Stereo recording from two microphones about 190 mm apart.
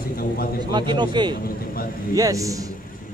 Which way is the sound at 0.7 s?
25° right (ahead or behind).